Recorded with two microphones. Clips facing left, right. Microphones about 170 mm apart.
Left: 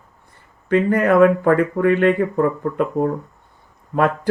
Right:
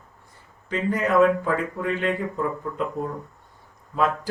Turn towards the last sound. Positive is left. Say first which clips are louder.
# left 5 dB
turn(degrees=60)  # may be behind; listen again after turning